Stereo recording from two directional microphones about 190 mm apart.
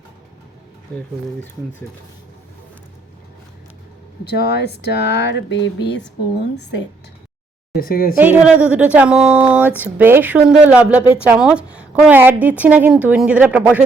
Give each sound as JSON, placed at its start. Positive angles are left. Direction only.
{"t": 4.3, "sound": "speech", "side_deg": 60}
{"t": 7.8, "sound": "speech", "side_deg": 50}
{"t": 8.1, "sound": "a woman's voice", "side_deg": -10}